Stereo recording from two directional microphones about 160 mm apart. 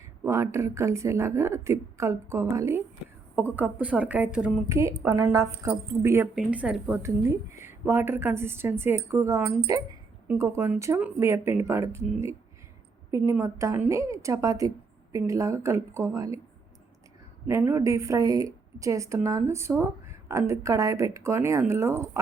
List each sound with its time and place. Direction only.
0.3 s a woman's voice: 15° right (ahead or behind)
4.7 s a woman's voice: 20° right (ahead or behind)
13.1 s a woman's voice: 20° right (ahead or behind)
17.4 s a woman's voice: 15° right (ahead or behind)